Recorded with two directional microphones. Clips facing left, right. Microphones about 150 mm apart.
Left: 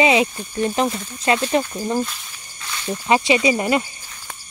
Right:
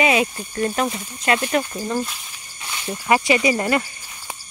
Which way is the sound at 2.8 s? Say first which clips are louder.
Left 1 dB; 20° left (ahead or behind).